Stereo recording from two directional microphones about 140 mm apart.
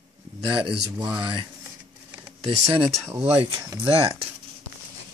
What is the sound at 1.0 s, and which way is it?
Speech, 35° right (ahead or behind).